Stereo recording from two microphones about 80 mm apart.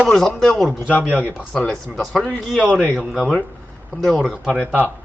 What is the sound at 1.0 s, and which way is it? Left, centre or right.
Speech, centre.